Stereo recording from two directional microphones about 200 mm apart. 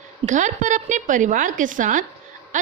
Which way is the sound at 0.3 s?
40° right (ahead or behind).